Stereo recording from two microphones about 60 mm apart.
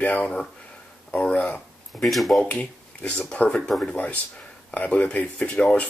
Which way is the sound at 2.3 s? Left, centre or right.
Centre.